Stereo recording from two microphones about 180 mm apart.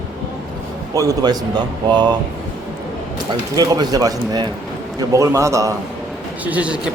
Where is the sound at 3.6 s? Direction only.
20° right (ahead or behind).